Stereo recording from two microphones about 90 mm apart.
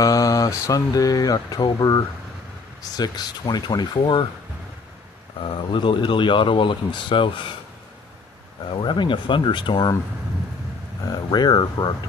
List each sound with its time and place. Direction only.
0.0 s speech: 40° left (ahead or behind)
3.0 s speech: 50° left (ahead or behind)
4.0 s speech: 65° left (ahead or behind)
5.7 s speech: 65° left (ahead or behind)
8.6 s speech: 65° left (ahead or behind)
11.1 s speech: 50° left (ahead or behind)